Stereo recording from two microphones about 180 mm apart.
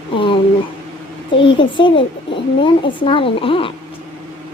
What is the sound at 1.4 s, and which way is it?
A child's voice, 25° left (ahead or behind).